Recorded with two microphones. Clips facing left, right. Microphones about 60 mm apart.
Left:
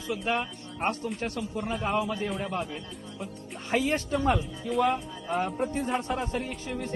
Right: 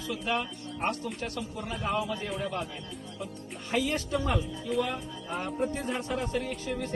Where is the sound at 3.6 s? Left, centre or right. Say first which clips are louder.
Left 3 dB; left.